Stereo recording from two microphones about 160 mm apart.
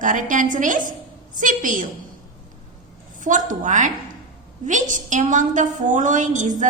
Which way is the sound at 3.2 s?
55° right (ahead or behind).